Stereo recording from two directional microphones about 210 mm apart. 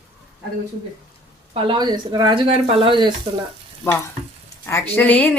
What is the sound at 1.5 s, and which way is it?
Speech, 25° right (ahead or behind).